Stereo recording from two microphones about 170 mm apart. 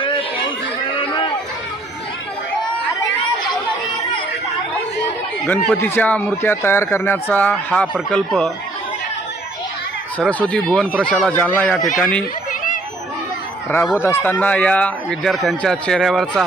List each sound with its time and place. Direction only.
0.9 s a sound: 30° left (ahead or behind)
5.5 s speech: 10° left (ahead or behind)
10.2 s speech: 5° left (ahead or behind)
13.9 s speech: 15° left (ahead or behind)